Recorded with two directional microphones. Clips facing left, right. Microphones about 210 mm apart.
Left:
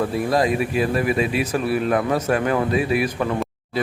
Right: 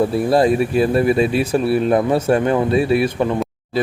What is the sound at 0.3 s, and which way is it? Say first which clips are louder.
A man's voice: right 5 dB; 30° right (ahead or behind).